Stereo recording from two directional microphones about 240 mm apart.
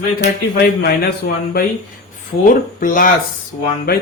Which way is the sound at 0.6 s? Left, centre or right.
Left.